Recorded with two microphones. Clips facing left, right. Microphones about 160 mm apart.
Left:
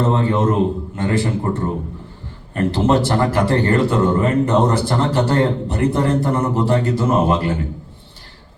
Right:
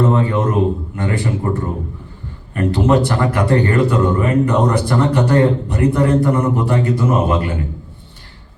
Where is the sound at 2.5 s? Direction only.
25° left (ahead or behind).